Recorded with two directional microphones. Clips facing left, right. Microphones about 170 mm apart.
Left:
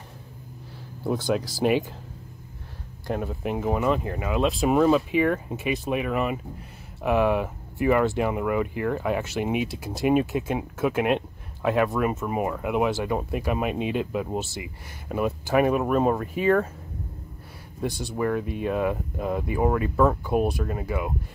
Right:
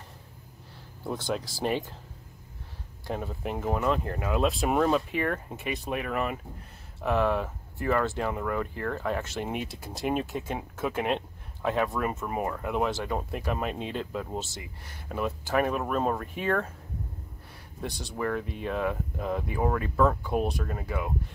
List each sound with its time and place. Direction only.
1.0 s speech: 5° left (ahead or behind)
3.1 s speech: 5° left (ahead or behind)
18.1 s speech: 10° left (ahead or behind)